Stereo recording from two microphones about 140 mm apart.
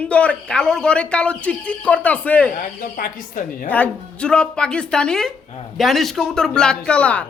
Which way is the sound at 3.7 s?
10° left (ahead or behind).